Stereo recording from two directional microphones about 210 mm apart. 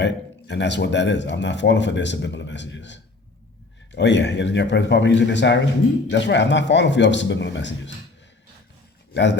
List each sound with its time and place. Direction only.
0.0 s speech: 55° left (ahead or behind)
9.1 s speech: 55° left (ahead or behind)